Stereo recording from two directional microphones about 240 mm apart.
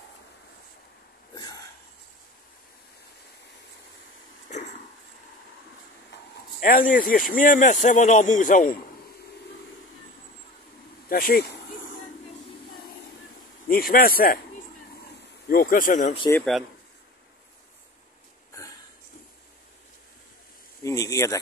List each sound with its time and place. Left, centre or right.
4.5 s a sound: left
6.1 s a sound: left
6.6 s speech: left
11.1 s speech: left
13.7 s speech: left
15.4 s speech: left
16.2 s speech: centre
20.8 s speech: centre